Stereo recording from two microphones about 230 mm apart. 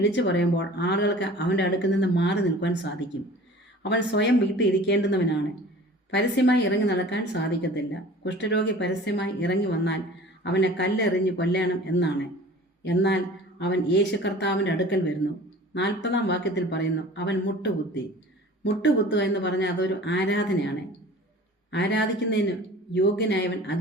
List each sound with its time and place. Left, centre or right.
0.0 s speech: left
3.8 s speech: left
19.1 s speech: left